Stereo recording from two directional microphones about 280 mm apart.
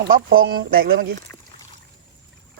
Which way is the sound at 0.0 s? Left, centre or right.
Right.